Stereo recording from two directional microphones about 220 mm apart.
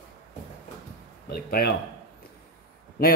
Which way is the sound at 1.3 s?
45° left (ahead or behind).